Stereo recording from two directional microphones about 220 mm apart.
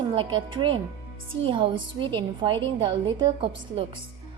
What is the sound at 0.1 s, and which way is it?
A woman's voice, 20° right (ahead or behind).